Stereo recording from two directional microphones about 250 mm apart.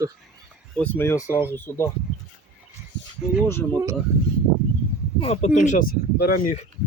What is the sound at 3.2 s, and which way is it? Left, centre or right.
Speech, centre.